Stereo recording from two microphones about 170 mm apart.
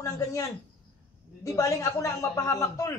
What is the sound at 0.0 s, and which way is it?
A man's voice, 20° left (ahead or behind).